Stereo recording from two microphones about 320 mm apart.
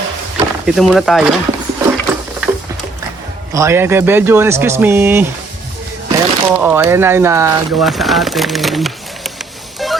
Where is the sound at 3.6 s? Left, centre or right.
Centre.